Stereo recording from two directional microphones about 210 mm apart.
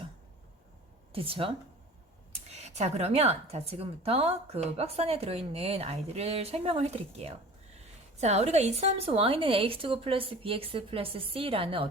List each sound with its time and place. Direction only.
1.1 s a woman's voice: 25° right (ahead or behind)